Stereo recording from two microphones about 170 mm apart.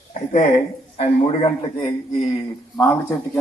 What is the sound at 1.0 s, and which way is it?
A man's voice, 35° left (ahead or behind).